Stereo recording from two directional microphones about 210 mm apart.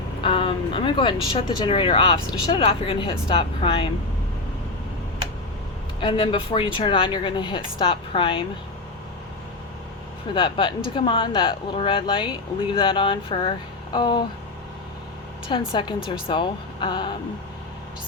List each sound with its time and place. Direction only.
0.2 s speech: 25° left (ahead or behind)
6.0 s speech: 25° left (ahead or behind)
10.3 s speech: 25° left (ahead or behind)
15.4 s speech: 20° left (ahead or behind)